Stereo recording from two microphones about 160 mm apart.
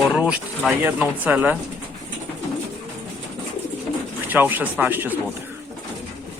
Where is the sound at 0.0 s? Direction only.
5° right (ahead or behind).